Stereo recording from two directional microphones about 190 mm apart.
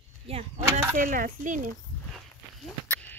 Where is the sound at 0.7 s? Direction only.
15° right (ahead or behind).